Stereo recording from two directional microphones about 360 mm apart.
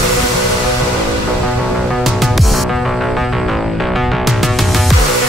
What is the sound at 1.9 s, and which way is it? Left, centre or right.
Music, centre.